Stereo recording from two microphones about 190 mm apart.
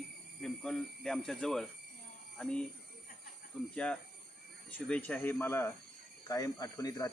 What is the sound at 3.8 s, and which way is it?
Speech, 5° left (ahead or behind).